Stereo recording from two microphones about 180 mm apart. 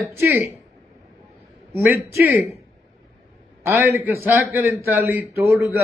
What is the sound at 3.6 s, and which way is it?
A man's voice, 15° right (ahead or behind).